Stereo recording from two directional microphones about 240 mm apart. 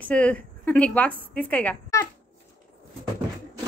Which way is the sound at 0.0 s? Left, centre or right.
Centre.